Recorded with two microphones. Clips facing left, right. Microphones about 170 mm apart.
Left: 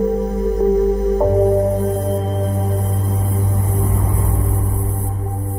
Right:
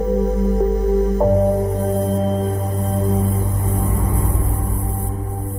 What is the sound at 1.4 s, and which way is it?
Music, centre (ahead or behind).